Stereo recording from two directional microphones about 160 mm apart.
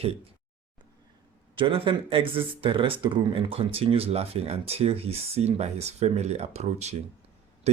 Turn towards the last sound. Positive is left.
turn(degrees=-45)  # may be behind; listen again after turning